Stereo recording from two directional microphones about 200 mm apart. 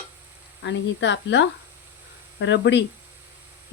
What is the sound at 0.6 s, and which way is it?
Speech, 65° left (ahead or behind).